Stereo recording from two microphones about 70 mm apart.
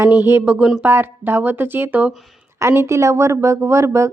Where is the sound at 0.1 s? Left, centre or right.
Right.